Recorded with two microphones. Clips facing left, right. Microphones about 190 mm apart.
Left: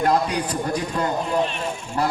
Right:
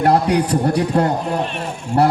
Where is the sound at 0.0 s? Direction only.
65° right (ahead or behind).